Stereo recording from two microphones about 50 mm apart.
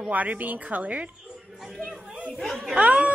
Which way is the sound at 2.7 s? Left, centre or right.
Right.